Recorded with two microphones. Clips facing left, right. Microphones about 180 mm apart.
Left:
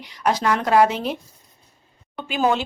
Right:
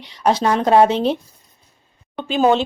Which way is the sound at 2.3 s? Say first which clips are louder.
Right 5 dB; 25° right (ahead or behind).